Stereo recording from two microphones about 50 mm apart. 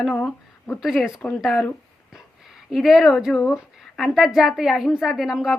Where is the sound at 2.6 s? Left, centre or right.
Centre.